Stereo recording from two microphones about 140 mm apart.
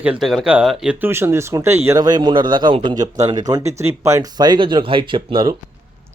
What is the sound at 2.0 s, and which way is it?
A man's voice, 30° right (ahead or behind).